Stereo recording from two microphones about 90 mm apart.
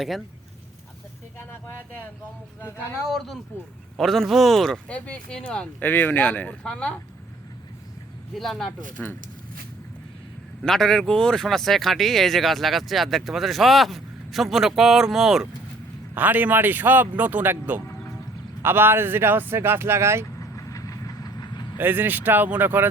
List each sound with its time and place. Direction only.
1.5 s speech: 25° left (ahead or behind)
3.1 s speech: centre (ahead or behind)
4.9 s speech: 15° left (ahead or behind)
5.8 s speech: 20° left (ahead or behind)
8.3 s speech: centre (ahead or behind)
9.0 s speech: 15° left (ahead or behind)
10.6 s speech: 5° left (ahead or behind)
16.1 s speech: 20° right (ahead or behind)
20.2 s vehicle: 35° left (ahead or behind)
21.8 s speech: 20° right (ahead or behind)